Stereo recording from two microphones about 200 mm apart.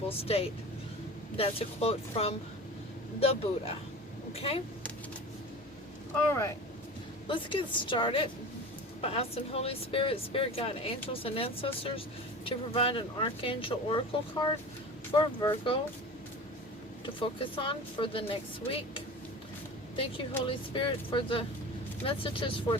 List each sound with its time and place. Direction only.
0.2 s speech: 30° left (ahead or behind)
7.3 s speech: 25° left (ahead or behind)
15.1 s speech: 25° left (ahead or behind)
17.2 s speech: 25° left (ahead or behind)